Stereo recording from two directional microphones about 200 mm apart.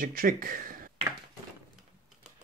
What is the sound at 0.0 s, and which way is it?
Speech, 45° right (ahead or behind).